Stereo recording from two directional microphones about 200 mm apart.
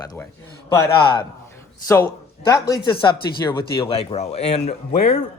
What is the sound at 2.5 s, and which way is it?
Speech, 20° left (ahead or behind).